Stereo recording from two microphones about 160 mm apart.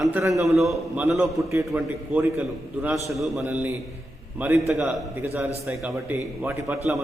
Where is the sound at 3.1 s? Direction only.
Centre (ahead or behind).